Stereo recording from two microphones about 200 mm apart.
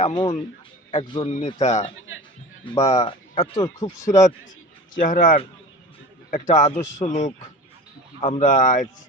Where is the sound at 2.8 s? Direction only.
35° left (ahead or behind).